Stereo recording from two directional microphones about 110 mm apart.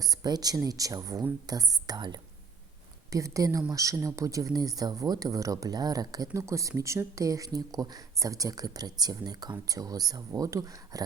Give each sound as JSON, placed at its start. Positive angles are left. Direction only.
{"t": 0.0, "sound": "a woman's voice", "side_deg": -35}